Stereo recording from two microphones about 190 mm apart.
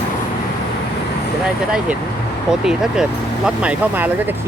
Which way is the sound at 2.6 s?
5° right (ahead or behind).